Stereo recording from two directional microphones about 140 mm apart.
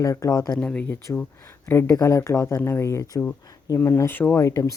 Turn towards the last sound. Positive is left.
turn(degrees=20)  # may be behind; listen again after turning